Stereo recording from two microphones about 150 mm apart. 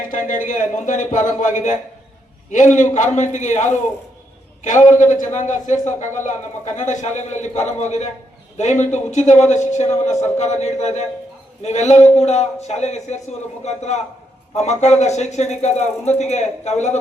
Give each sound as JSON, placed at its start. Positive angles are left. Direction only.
{"t": 0.1, "sound": "a man's voice", "side_deg": 60}